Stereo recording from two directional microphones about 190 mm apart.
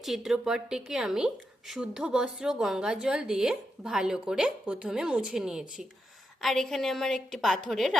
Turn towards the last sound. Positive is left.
turn(degrees=0)  # may be behind; listen again after turning